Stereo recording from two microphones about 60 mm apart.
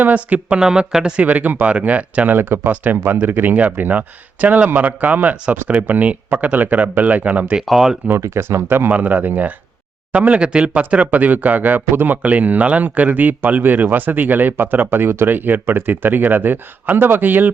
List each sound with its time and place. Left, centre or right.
0.0 s speech: right
2.3 s speech: right
7.6 s speech: centre
8.2 s speech: right
8.9 s speech: right